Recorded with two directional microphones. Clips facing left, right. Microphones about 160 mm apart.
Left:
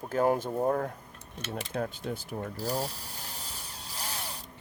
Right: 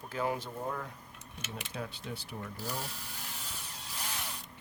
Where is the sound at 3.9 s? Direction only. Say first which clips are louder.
Left 2 dB; 35° left (ahead or behind).